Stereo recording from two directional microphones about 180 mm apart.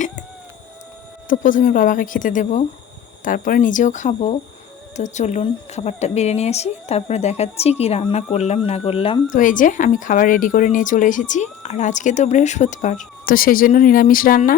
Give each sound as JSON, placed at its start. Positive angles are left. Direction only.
{"t": 1.3, "sound": "a woman's voice", "side_deg": 45}
{"t": 9.3, "sound": "a woman's voice", "side_deg": 45}